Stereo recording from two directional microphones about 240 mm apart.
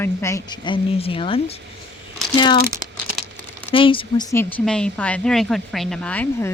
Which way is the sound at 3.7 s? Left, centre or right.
Left.